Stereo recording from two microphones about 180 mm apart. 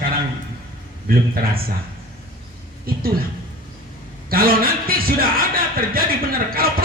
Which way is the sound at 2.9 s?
55° right (ahead or behind).